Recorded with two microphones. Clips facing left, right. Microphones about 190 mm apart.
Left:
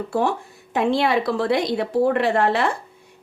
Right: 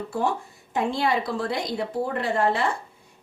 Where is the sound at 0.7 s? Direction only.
75° left (ahead or behind).